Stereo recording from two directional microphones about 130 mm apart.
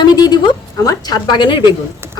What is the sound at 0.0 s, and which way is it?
A woman's voice, 35° left (ahead or behind).